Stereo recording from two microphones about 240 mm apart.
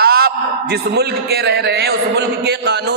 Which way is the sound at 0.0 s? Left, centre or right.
Right.